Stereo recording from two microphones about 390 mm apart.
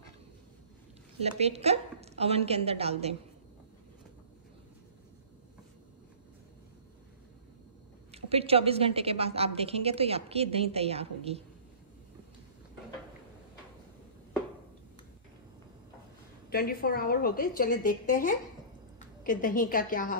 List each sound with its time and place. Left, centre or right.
1.4 s a woman's voice: centre
8.1 s a woman's voice: centre
16.4 s a woman's voice: left